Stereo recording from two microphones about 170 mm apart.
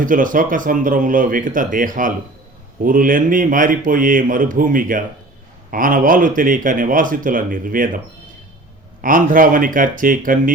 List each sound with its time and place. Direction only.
0.0 s speech: 50° right (ahead or behind)